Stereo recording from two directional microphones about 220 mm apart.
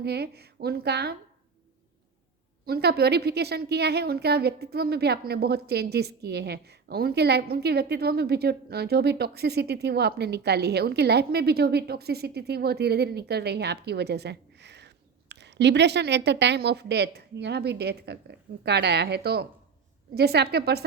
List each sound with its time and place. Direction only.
0.0 s a woman's voice: 45° right (ahead or behind)
2.6 s a woman's voice: 45° right (ahead or behind)